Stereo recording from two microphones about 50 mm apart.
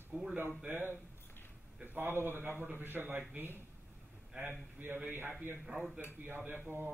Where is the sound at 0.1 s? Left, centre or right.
Centre.